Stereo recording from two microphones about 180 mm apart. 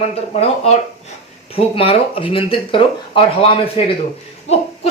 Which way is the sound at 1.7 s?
30° left (ahead or behind).